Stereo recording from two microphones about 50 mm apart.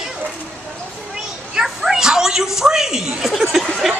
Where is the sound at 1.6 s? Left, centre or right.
Centre.